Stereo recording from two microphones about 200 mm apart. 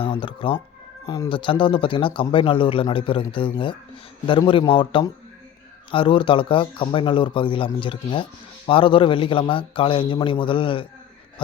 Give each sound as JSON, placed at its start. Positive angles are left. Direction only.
{"t": 0.0, "sound": "speech", "side_deg": 25}